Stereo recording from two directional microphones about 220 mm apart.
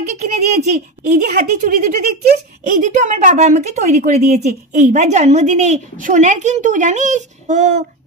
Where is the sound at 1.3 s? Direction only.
40° right (ahead or behind).